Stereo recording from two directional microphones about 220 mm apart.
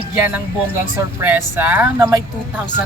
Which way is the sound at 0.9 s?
10° right (ahead or behind).